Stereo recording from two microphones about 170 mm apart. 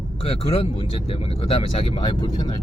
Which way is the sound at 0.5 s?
35° left (ahead or behind).